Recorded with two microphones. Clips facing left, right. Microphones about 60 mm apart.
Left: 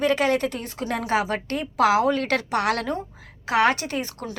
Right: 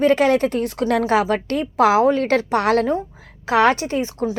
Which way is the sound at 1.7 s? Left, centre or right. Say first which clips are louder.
Right 4 dB; right.